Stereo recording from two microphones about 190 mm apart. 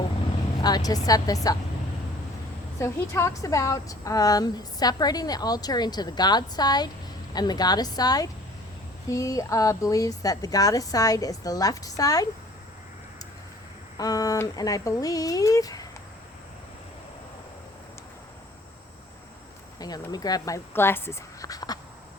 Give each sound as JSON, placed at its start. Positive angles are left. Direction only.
{"t": 0.6, "sound": "a woman's voice", "side_deg": 20}
{"t": 2.7, "sound": "a woman's voice", "side_deg": 15}
{"t": 13.9, "sound": "a woman's voice", "side_deg": 20}
{"t": 19.8, "sound": "a woman's voice", "side_deg": 20}